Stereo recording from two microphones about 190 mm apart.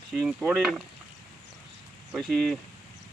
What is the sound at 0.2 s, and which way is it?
Speech, 5° right (ahead or behind).